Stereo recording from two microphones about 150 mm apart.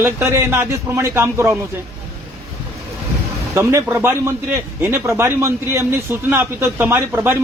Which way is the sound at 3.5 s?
20° right (ahead or behind).